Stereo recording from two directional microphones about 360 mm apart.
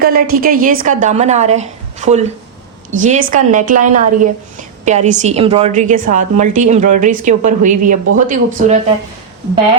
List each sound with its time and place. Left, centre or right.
0.0 s a woman's voice: right